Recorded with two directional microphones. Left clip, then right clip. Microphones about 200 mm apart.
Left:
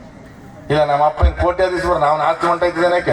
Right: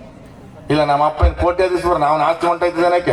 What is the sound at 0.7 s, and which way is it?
A man's voice, 35° right (ahead or behind).